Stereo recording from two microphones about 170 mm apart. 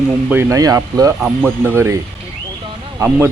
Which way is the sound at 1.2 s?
10° right (ahead or behind).